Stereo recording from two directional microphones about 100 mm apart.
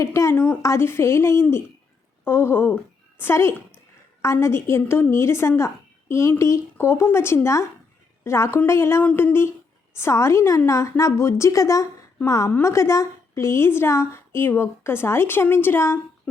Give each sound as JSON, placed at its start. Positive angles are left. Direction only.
{"t": 0.0, "sound": "a woman's voice", "side_deg": 30}